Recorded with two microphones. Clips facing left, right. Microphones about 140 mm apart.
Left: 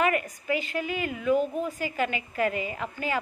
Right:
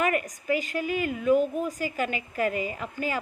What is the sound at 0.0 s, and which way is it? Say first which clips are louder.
A woman's voice: left 1 dB; 40° right (ahead or behind).